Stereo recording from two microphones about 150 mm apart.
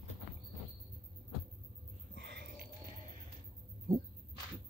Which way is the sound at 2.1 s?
90° right.